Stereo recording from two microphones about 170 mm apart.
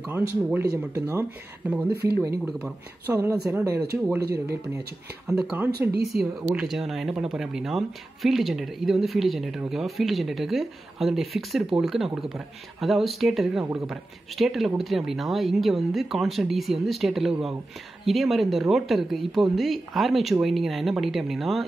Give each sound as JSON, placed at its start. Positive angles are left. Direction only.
{"t": 0.0, "sound": "speech", "side_deg": -10}
{"t": 5.2, "sound": "speech", "side_deg": -5}
{"t": 5.7, "sound": "speech", "side_deg": -70}
{"t": 6.5, "sound": "speech", "side_deg": 0}